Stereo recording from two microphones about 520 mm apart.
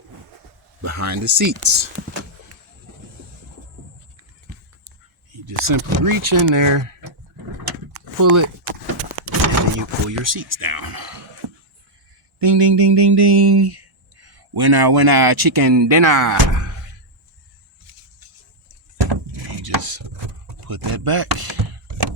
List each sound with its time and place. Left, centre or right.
0.8 s speech: right
5.3 s speech: right
8.2 s speech: right
9.5 s speech: right
11.4 s a sound: right
12.4 s speech: right
18.7 s a sound: right